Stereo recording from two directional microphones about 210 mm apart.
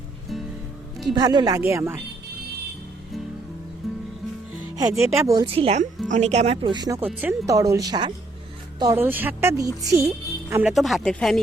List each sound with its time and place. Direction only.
1.1 s a woman's voice: 20° right (ahead or behind)
3.8 s music: centre (ahead or behind)
4.8 s a woman's voice: 15° right (ahead or behind)
10.5 s speech: 5° right (ahead or behind)